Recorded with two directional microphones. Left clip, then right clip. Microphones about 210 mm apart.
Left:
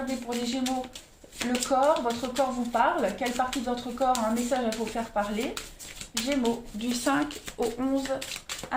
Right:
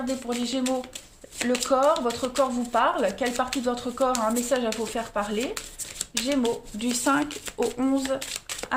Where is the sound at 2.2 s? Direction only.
35° right (ahead or behind).